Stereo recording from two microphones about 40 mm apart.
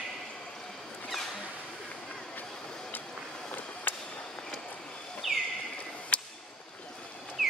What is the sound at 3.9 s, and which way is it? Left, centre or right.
Skateboard, left.